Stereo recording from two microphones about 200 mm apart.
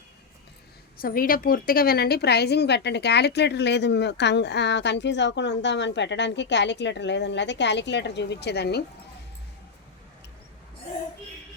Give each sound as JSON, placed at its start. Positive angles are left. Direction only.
{"t": 0.9, "sound": "a woman's voice", "side_deg": 45}